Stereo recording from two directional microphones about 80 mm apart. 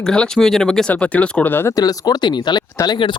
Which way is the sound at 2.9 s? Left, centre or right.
Left.